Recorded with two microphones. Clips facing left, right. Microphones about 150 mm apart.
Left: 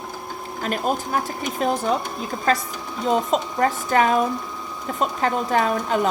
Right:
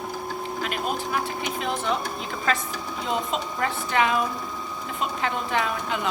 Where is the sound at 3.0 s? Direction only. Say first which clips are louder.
Left 7 dB; 40° left (ahead or behind).